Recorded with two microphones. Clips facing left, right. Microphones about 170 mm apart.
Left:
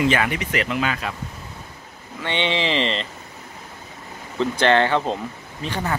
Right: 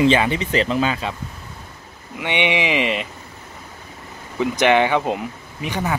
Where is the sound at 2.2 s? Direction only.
15° right (ahead or behind).